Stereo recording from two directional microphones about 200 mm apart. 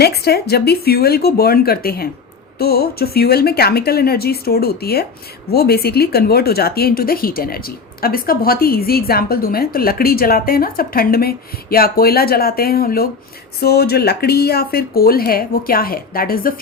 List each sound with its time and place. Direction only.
0.0 s speech: 55° left (ahead or behind)